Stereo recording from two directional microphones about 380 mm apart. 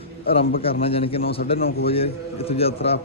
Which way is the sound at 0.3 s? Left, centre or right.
Centre.